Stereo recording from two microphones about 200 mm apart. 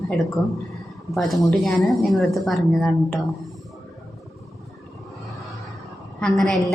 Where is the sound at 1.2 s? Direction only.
Centre (ahead or behind).